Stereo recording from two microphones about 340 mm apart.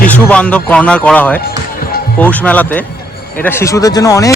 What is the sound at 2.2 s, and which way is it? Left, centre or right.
Speech, centre.